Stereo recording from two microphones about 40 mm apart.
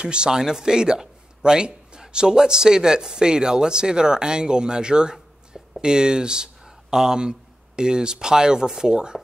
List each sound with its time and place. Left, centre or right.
0.0 s speech: right